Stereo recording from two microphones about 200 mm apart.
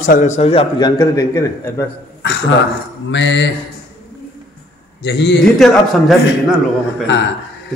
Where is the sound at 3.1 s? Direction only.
65° left (ahead or behind).